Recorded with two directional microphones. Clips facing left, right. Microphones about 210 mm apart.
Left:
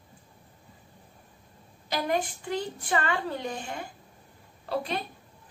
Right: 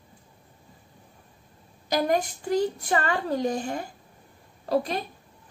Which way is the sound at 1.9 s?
40° right (ahead or behind).